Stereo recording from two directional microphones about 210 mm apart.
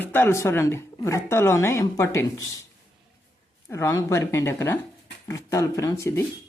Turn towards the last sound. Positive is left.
turn(degrees=15)  # may be behind; listen again after turning